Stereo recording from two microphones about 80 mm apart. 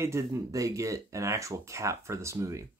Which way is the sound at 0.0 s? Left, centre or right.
Right.